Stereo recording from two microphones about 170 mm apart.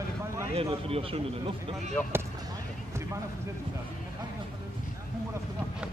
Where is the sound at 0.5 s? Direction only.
35° right (ahead or behind).